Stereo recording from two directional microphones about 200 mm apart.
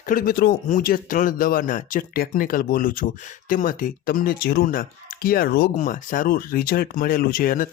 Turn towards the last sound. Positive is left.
turn(degrees=45)  # may be behind; listen again after turning